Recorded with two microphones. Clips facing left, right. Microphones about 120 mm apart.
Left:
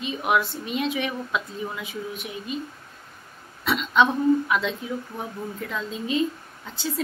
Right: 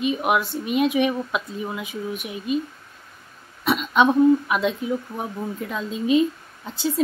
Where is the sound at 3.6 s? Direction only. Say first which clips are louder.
Right 2 dB; 15° right (ahead or behind).